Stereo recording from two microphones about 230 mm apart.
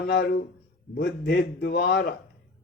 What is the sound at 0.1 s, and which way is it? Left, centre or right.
Mantra, left.